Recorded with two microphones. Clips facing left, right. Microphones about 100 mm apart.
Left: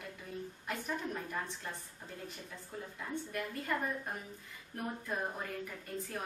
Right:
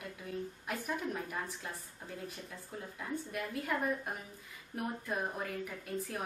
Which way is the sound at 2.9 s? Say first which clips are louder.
Right 1 dB; 5° right (ahead or behind).